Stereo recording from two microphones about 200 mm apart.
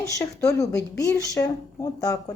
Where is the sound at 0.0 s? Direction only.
15° left (ahead or behind).